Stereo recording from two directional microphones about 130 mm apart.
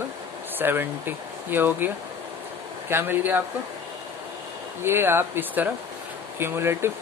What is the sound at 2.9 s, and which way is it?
Speech, 15° right (ahead or behind).